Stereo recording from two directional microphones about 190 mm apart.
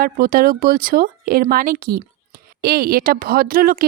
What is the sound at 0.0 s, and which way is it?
A woman's voice, 50° right (ahead or behind).